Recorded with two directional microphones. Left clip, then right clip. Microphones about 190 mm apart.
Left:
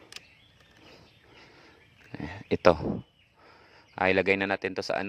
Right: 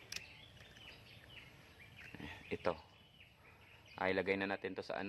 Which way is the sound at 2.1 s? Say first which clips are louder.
Left 15 dB; 55° left (ahead or behind).